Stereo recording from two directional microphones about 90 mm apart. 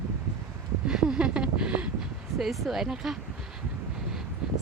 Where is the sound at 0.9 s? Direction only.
10° right (ahead or behind).